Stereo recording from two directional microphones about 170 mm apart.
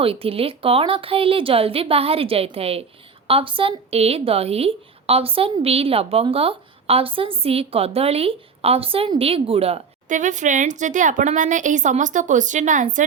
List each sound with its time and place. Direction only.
0.0 s a woman's voice: 35° right (ahead or behind)